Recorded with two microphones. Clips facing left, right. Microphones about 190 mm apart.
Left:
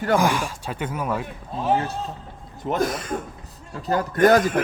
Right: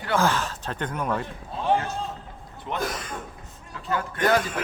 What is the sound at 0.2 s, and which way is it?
Speech, 10° left (ahead or behind).